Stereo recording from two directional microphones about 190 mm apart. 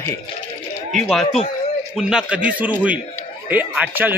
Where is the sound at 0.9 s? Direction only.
Centre (ahead or behind).